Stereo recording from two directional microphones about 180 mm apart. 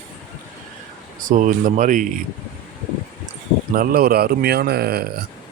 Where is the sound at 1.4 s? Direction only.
45° right (ahead or behind).